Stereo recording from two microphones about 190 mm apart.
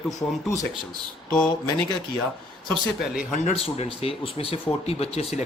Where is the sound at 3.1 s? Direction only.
35° left (ahead or behind).